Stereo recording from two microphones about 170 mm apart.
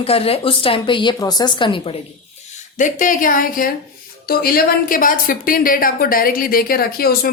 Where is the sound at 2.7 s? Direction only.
50° left (ahead or behind).